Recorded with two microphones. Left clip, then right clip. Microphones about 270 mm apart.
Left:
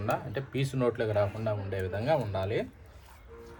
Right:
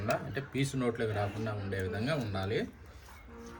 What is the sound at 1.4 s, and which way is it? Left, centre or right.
A man's voice, centre.